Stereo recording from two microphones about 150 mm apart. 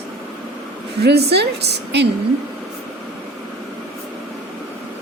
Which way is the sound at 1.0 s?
90° right.